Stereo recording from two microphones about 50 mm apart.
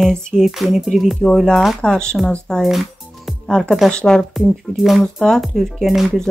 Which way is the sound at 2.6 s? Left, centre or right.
Centre.